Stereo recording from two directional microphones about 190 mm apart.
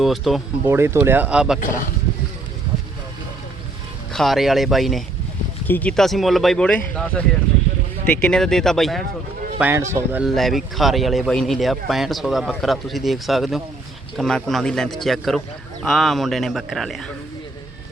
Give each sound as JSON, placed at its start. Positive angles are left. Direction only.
{"t": 0.0, "sound": "speech", "side_deg": 0}
{"t": 0.7, "sound": "speech", "side_deg": -15}
{"t": 4.1, "sound": "speech", "side_deg": 0}
{"t": 9.6, "sound": "speech", "side_deg": -10}
{"t": 10.2, "sound": "speech", "side_deg": 0}